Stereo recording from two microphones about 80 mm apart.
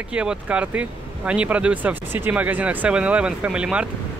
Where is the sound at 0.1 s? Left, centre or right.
Centre.